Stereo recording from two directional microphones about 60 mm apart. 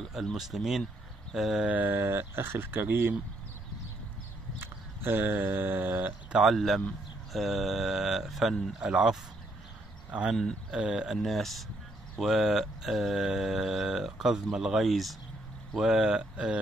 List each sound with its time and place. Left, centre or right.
0.1 s speech: centre
1.7 s a sound: right
2.0 s speech: right
4.6 s a sound: right
6.4 s speech: centre
10.7 s speech: centre
11.1 s speech: centre